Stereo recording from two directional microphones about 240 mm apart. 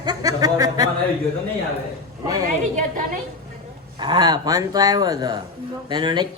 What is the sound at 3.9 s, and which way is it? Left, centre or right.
Speech, centre.